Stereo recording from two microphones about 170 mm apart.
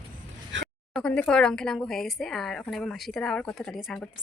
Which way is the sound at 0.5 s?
90° right.